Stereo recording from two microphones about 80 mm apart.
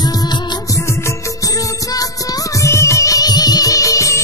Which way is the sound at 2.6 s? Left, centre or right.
Left.